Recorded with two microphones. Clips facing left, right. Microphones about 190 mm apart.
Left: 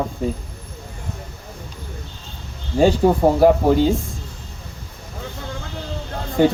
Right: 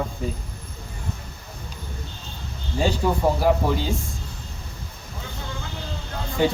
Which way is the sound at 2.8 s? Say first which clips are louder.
Left 7 dB; 55° left (ahead or behind).